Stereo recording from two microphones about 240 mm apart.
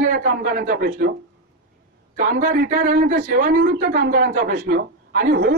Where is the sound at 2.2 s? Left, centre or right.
Right.